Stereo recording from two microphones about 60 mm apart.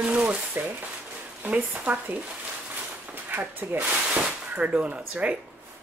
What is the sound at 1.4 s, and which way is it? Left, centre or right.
Speech, right.